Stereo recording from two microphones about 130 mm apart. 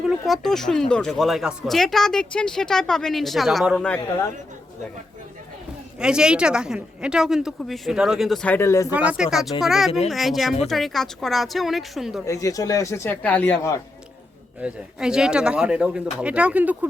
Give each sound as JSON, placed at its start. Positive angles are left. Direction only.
{"t": 0.0, "sound": "speech", "side_deg": 0}
{"t": 6.0, "sound": "speech", "side_deg": -5}
{"t": 8.4, "sound": "speech", "side_deg": 20}
{"t": 8.9, "sound": "speech", "side_deg": -10}
{"t": 12.2, "sound": "speech", "side_deg": 25}
{"t": 14.6, "sound": "speech", "side_deg": -5}